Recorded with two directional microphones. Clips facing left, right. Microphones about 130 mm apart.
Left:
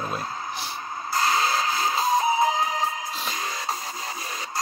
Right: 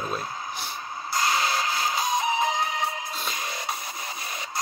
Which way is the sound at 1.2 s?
30° left (ahead or behind).